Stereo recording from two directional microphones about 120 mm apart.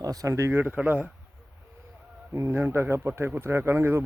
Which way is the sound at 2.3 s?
20° right (ahead or behind).